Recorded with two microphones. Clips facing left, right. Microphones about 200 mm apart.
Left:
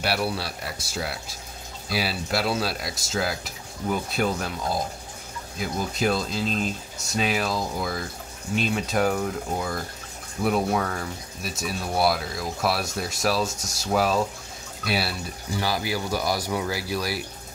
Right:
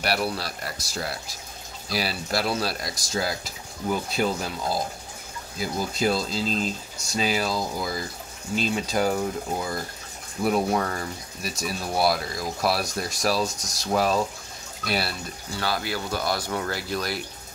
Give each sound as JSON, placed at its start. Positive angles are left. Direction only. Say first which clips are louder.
{"t": 0.0, "sound": "speech", "louder": "even", "side_deg": 0}
{"t": 13.5, "sound": "speech", "louder": "left 2 dB", "side_deg": 25}
{"t": 13.9, "sound": "speech", "louder": "even", "side_deg": 0}